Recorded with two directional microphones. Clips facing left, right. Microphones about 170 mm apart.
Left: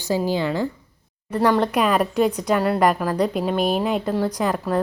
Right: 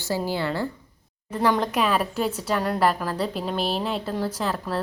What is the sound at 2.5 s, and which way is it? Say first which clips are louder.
Speech: left 2 dB; 5° left (ahead or behind).